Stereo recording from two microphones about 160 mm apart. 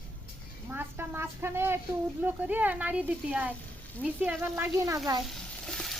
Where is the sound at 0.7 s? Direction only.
10° right (ahead or behind).